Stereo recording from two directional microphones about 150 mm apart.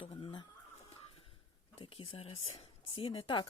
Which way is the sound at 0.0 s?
35° left (ahead or behind).